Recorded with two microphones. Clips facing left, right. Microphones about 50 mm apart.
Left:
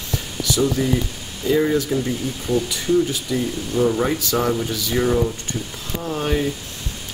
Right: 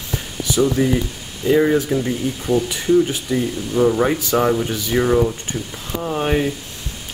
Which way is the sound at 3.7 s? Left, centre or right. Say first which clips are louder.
Right 3 dB; centre.